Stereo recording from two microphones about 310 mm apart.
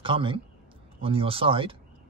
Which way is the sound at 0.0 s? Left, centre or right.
Centre.